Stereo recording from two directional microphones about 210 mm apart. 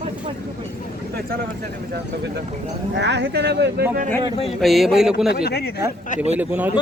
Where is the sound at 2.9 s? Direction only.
55° right (ahead or behind).